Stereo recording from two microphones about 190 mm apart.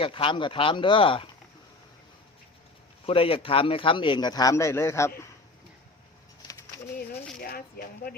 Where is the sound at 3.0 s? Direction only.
30° left (ahead or behind).